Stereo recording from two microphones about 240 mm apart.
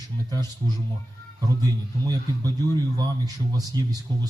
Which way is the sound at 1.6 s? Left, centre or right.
Centre.